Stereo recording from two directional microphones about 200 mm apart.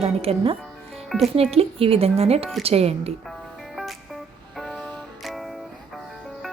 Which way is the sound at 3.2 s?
Centre (ahead or behind).